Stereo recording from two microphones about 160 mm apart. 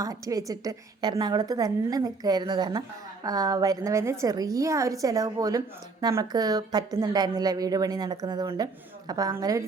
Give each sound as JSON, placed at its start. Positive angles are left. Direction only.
{"t": 0.0, "sound": "a woman's voice", "side_deg": -20}